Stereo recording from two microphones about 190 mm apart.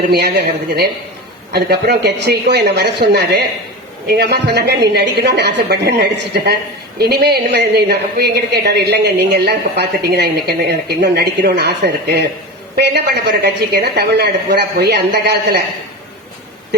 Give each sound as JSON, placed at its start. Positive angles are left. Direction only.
{"t": 0.1, "sound": "a woman's voice", "side_deg": -60}